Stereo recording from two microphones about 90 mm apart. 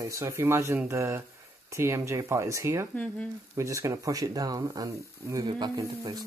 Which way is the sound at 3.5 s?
40° right (ahead or behind).